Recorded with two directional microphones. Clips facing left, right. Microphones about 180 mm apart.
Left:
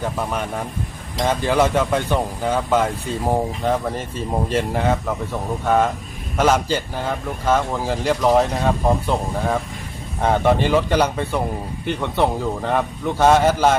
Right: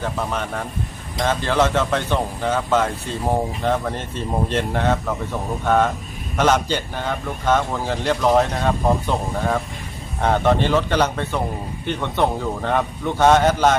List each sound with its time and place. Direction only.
0.0 s a man's voice: 10° left (ahead or behind)